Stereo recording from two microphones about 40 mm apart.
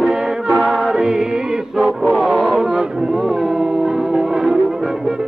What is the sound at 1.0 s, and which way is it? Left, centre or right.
Music, centre.